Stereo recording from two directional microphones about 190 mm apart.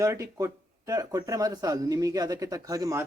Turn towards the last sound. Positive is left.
turn(degrees=-20)  # may be behind; listen again after turning